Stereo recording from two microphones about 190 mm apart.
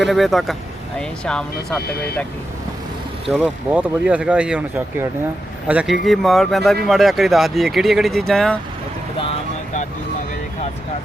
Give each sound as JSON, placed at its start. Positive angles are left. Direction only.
{"t": 0.0, "sound": "speech", "side_deg": 0}
{"t": 1.9, "sound": "speech", "side_deg": 55}
{"t": 3.2, "sound": "speech", "side_deg": -5}